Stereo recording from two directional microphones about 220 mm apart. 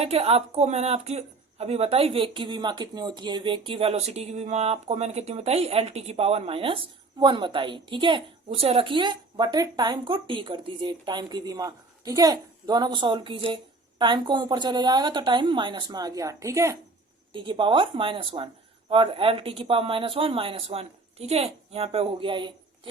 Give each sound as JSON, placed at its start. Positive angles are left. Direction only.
{"t": 0.0, "sound": "speech", "side_deg": -25}